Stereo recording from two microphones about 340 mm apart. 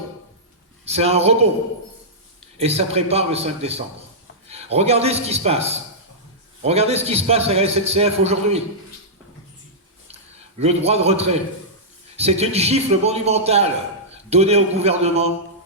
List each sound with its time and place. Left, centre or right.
0.9 s a man's voice: centre
2.6 s a man's voice: centre
10.6 s a man's voice: centre